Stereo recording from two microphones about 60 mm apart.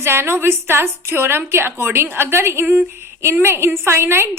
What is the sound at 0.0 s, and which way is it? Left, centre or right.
A woman's voice, right.